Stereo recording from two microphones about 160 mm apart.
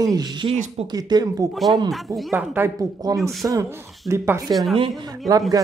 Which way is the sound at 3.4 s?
15° right (ahead or behind).